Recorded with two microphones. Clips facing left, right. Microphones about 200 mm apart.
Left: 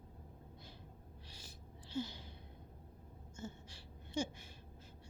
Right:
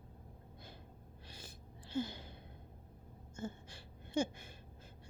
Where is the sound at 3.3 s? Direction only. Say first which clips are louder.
Right 4 dB; 55° right (ahead or behind).